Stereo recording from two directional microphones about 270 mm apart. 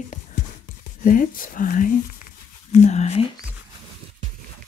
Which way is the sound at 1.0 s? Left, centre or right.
Left.